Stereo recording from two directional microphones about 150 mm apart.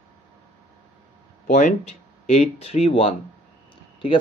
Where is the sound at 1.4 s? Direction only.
60° left (ahead or behind).